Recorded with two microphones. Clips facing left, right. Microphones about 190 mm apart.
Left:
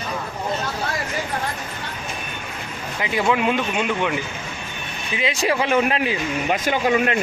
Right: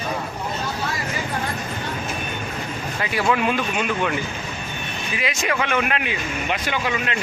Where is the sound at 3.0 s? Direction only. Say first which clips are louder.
Left 1 dB; 20° left (ahead or behind).